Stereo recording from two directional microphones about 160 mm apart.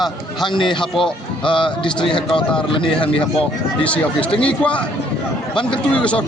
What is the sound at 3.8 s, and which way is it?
Speech, 10° left (ahead or behind).